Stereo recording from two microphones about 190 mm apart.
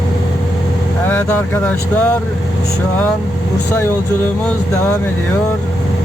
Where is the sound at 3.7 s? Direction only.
10° left (ahead or behind).